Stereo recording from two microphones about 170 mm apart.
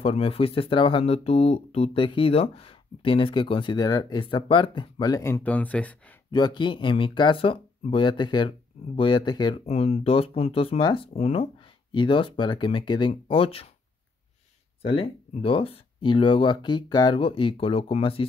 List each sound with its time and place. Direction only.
0.0 s speech: 35° left (ahead or behind); by 6.1 s 10° left (ahead or behind)
6.3 s speech: 25° left (ahead or behind)
9.7 s speech: 35° left (ahead or behind)
14.8 s speech: 35° left (ahead or behind)